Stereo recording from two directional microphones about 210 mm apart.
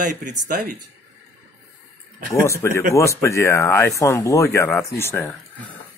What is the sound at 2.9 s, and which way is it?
Speech, 15° left (ahead or behind).